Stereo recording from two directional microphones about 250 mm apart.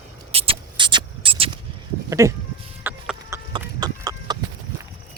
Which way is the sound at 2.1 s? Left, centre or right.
Centre.